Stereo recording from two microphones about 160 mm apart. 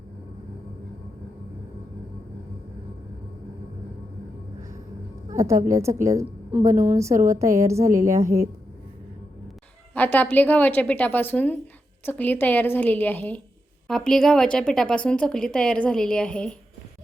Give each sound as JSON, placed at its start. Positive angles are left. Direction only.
{"t": 5.4, "sound": "a woman's voice", "side_deg": -20}
{"t": 9.9, "sound": "a woman's voice", "side_deg": 10}